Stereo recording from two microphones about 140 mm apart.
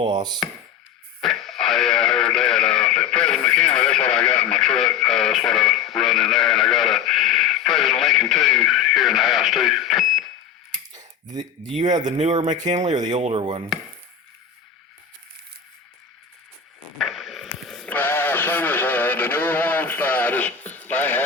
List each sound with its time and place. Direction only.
0.0 s chopping: 30° right (ahead or behind)
1.2 s radio: centre (ahead or behind)
10.9 s a sound: 30° right (ahead or behind)
12.0 s speech: 55° right (ahead or behind)
13.1 s chopping: 50° right (ahead or behind)
17.0 s radio: centre (ahead or behind)